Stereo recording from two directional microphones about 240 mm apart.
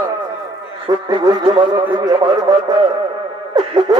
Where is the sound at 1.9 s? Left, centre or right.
Centre.